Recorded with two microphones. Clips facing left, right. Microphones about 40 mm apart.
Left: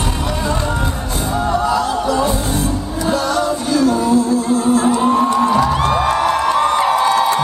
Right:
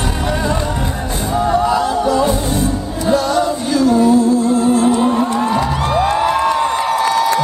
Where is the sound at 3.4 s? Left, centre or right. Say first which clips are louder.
Right 1 dB; centre.